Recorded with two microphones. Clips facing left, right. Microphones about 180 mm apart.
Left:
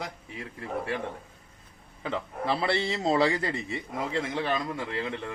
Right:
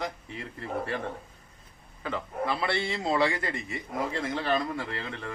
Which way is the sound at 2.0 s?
30° left (ahead or behind).